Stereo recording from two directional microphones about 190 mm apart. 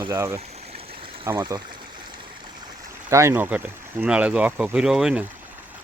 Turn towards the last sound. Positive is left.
turn(degrees=-5)  # may be behind; listen again after turning